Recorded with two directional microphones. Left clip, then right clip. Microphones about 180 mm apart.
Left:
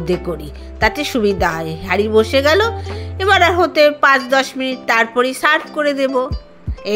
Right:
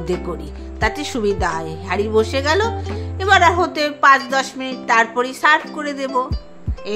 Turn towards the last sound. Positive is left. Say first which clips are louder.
# left 5 dB
turn(degrees=20)  # may be behind; listen again after turning